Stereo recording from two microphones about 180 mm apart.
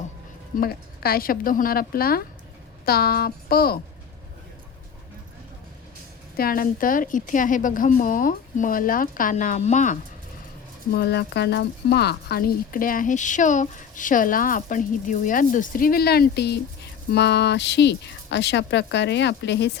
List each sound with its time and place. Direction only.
0.6 s speech: 55° left (ahead or behind)
6.3 s a woman's voice: 55° left (ahead or behind)
10.9 s speech: 65° left (ahead or behind)